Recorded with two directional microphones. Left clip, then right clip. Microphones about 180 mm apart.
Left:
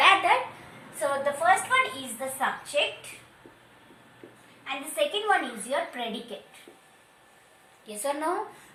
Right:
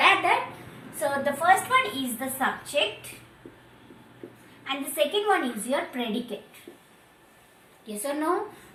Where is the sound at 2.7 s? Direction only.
10° left (ahead or behind).